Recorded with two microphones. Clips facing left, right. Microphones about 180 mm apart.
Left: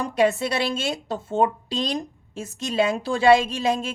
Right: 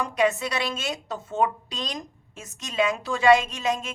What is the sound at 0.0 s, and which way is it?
A woman's voice, 30° left (ahead or behind).